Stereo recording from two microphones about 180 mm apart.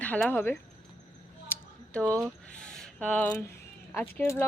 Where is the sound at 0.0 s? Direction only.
10° left (ahead or behind).